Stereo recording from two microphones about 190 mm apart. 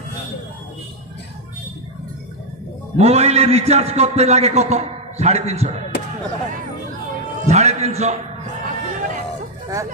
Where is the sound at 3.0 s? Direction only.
35° right (ahead or behind).